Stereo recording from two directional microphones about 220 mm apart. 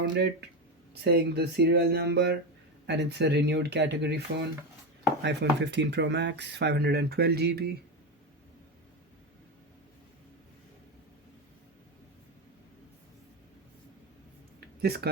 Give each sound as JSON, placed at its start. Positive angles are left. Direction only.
{"t": 0.1, "sound": "speech", "side_deg": -50}
{"t": 5.2, "sound": "speech", "side_deg": -50}
{"t": 14.8, "sound": "speech", "side_deg": -45}